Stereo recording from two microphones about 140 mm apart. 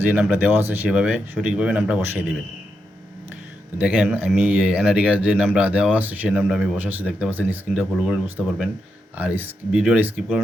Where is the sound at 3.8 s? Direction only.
10° right (ahead or behind).